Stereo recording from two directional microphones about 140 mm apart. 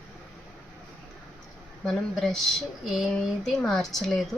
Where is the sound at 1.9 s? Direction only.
5° left (ahead or behind).